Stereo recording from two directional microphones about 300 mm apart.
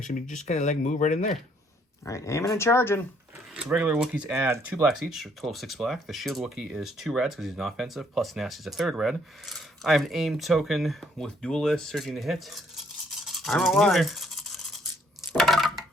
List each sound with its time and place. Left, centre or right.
0.0 s speech: left
2.0 s speech: centre
3.5 s speech: centre
13.1 s toothbrush: centre
15.3 s a sound: centre